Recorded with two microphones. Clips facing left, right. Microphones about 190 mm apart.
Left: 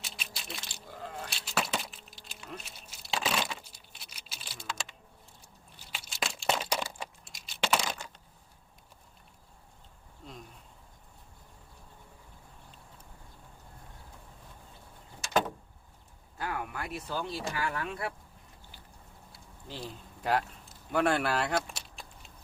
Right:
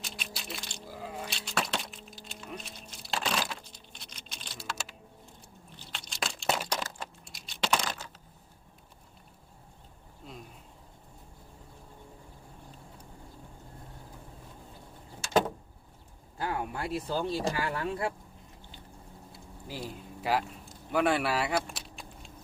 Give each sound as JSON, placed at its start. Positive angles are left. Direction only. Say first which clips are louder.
{"t": 0.0, "sound": "sheep", "louder": "right 3 dB", "side_deg": 0}
{"t": 5.9, "sound": "a sound", "louder": "even", "side_deg": 5}
{"t": 6.7, "sound": "computer keyboard", "louder": "left 1 dB", "side_deg": 10}
{"t": 16.4, "sound": "a sound", "louder": "right 3 dB", "side_deg": -25}
{"t": 17.1, "sound": "speech", "louder": "right 5 dB", "side_deg": -35}
{"t": 19.6, "sound": "speech", "louder": "right 2 dB", "side_deg": -5}
{"t": 20.9, "sound": "keys jangling", "louder": "right 1 dB", "side_deg": 0}